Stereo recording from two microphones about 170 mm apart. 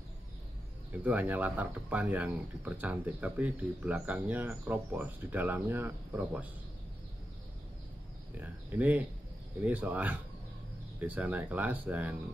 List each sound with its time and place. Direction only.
1.0 s speech: 10° right (ahead or behind)
8.4 s speech: 10° right (ahead or behind)